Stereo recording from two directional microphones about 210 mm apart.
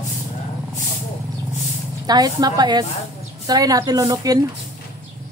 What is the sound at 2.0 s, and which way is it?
A woman's voice, 20° right (ahead or behind).